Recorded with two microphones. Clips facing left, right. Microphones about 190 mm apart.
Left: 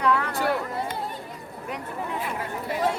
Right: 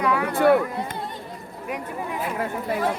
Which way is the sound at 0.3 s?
55° right (ahead or behind).